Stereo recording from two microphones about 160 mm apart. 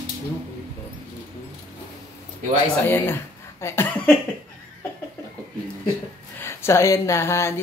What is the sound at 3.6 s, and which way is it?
Speech, 15° left (ahead or behind).